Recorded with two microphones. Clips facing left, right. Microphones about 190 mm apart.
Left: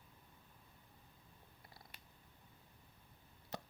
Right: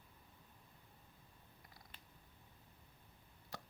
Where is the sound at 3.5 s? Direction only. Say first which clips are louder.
Left 5 dB; 20° left (ahead or behind).